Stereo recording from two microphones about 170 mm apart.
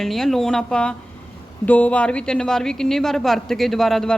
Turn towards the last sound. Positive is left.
turn(degrees=0)  # may be behind; listen again after turning